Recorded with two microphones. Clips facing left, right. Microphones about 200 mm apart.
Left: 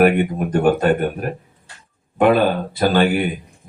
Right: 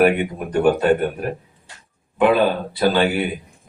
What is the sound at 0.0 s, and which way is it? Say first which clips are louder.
Speech: left 2 dB; 50° left (ahead or behind).